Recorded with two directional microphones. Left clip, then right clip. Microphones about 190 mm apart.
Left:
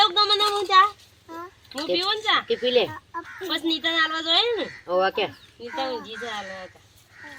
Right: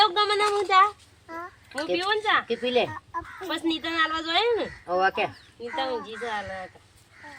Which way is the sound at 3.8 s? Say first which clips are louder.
Left 3 dB; 20° left (ahead or behind).